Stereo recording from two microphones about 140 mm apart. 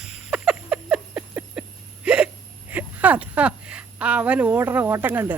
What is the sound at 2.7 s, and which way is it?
A woman's voice, 10° right (ahead or behind).